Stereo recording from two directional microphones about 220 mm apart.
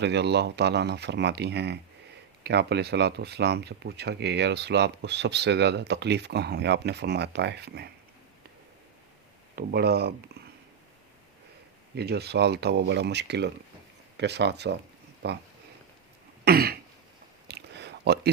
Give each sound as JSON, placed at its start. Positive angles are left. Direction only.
{"t": 0.0, "sound": "speech", "side_deg": -50}
{"t": 9.6, "sound": "speech", "side_deg": -45}
{"t": 11.9, "sound": "speech", "side_deg": -50}
{"t": 16.4, "sound": "throat clearing", "side_deg": -45}
{"t": 17.5, "sound": "a sound", "side_deg": -50}